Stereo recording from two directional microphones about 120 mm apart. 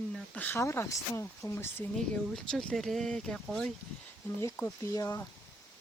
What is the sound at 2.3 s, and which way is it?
Speech, 5° left (ahead or behind).